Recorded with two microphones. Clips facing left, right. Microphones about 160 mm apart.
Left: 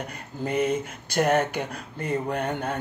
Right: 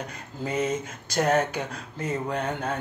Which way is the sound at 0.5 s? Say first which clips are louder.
Left 2 dB; 10° left (ahead or behind).